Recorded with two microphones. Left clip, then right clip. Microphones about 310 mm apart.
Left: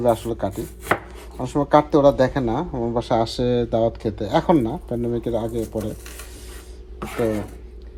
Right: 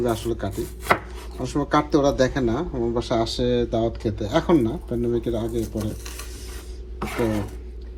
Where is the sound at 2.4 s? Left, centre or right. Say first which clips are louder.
Even; centre.